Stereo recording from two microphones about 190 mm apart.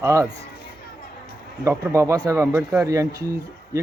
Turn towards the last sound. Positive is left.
turn(degrees=-15)  # may be behind; listen again after turning